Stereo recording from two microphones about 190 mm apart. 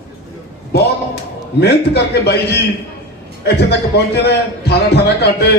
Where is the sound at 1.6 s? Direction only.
60° left (ahead or behind).